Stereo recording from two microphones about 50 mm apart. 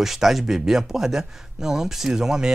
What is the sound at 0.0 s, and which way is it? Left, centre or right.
Speech, centre.